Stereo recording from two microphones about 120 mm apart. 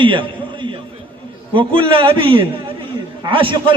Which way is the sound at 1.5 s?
45° right (ahead or behind).